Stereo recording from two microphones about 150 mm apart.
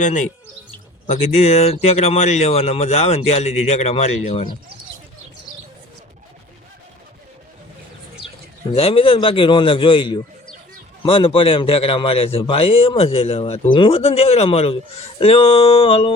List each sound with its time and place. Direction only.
0.0 s speech: 55° left (ahead or behind)
8.7 s a man's voice: 40° left (ahead or behind)